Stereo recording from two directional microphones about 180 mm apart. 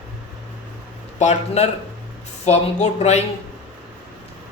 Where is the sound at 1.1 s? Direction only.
40° left (ahead or behind).